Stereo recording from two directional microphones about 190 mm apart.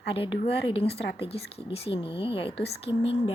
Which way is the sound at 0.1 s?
30° left (ahead or behind).